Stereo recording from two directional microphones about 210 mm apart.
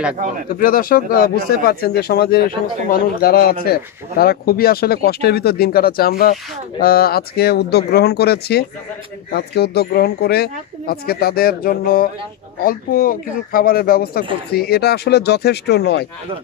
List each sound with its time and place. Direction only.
0.6 s speech: 45° left (ahead or behind)